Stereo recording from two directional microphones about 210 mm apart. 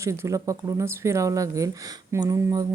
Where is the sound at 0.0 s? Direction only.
15° right (ahead or behind).